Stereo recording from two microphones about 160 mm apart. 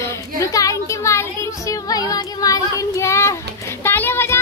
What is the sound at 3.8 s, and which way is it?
Music, 15° left (ahead or behind).